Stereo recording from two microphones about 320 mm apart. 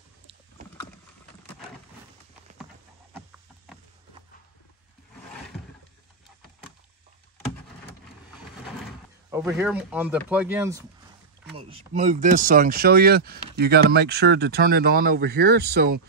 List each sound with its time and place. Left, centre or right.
3.1 s a sound: centre
9.3 s speech: centre
11.5 s speech: centre